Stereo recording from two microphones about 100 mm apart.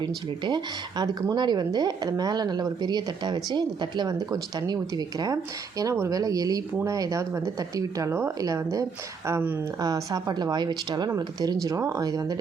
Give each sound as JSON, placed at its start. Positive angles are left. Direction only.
{"t": 0.0, "sound": "speech", "side_deg": -50}
{"t": 9.8, "sound": "speech", "side_deg": -35}
{"t": 11.1, "sound": "speech", "side_deg": -35}